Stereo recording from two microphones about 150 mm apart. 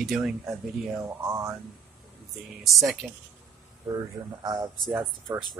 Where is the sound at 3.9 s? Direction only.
25° right (ahead or behind).